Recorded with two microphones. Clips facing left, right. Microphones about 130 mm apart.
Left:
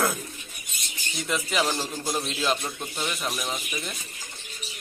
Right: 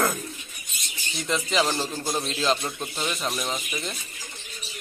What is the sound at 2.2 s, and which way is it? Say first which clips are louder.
Speech: right 3 dB; 5° left (ahead or behind).